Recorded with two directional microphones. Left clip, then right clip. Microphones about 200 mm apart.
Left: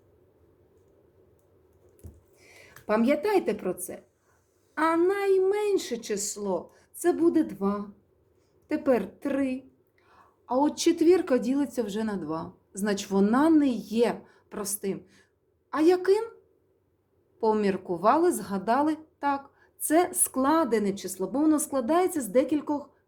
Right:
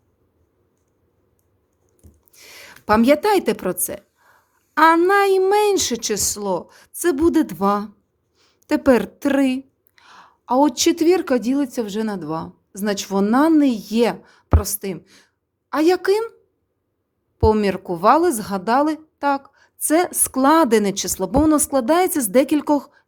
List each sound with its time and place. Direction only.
2.3 s a woman's voice: 45° right (ahead or behind)
17.3 s speech: 30° right (ahead or behind)